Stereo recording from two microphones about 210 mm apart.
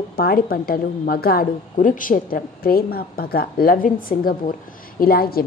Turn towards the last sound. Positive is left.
turn(degrees=45)  # may be behind; listen again after turning